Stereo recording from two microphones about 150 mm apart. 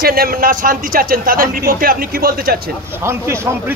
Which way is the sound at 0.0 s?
80° right.